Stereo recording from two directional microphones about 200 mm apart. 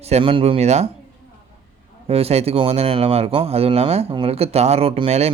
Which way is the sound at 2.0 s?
30° right (ahead or behind).